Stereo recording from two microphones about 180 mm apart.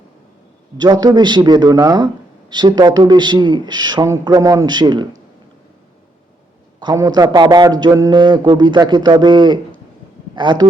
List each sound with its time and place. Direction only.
0.8 s a man's voice: 20° right (ahead or behind)
6.7 s a man's voice: 20° right (ahead or behind)